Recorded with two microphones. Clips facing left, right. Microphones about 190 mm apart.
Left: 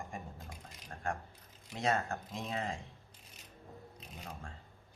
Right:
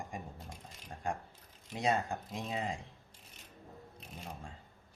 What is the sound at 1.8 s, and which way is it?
Speech, 15° right (ahead or behind).